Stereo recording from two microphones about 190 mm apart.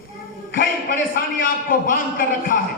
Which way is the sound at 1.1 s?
50° left (ahead or behind).